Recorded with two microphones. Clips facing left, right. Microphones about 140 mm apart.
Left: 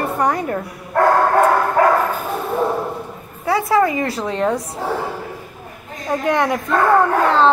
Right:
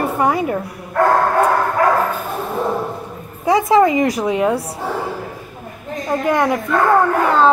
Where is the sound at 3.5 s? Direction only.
20° right (ahead or behind).